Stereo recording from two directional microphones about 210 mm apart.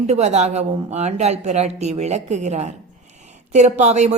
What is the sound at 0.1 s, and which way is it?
A woman's voice, 30° right (ahead or behind).